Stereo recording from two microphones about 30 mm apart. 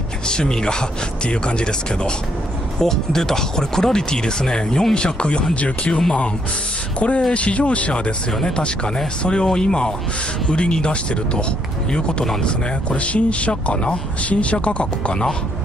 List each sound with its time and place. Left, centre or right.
0.3 s speech: left
2.8 s speech: centre; by 6.0 s left
7.0 s speech: left
8.5 s speech: left
12.4 s speech: left